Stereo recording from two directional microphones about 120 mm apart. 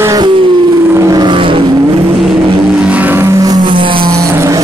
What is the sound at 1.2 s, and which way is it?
Vehicle, 45° right (ahead or behind).